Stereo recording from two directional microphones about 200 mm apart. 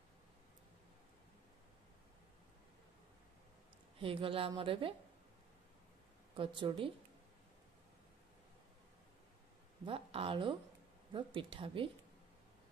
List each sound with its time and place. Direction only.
4.0 s a woman's voice: 25° right (ahead or behind)
6.3 s a woman's voice: 25° right (ahead or behind)
9.8 s a woman's voice: 25° right (ahead or behind)